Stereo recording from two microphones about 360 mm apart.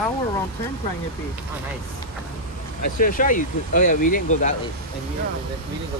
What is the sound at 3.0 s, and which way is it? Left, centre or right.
Speech, left.